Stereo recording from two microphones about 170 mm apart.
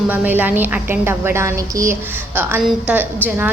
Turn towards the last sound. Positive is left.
turn(degrees=-10)  # may be behind; listen again after turning